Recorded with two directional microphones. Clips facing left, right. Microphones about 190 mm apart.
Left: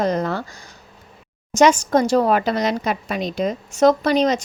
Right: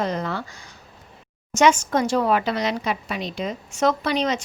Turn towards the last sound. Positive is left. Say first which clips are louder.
# left 6 dB
turn(degrees=40)  # may be behind; listen again after turning